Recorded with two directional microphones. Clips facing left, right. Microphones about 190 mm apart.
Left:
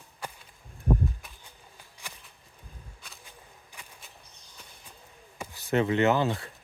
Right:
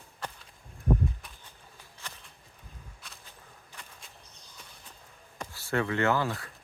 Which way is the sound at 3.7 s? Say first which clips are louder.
Even; 10° left (ahead or behind).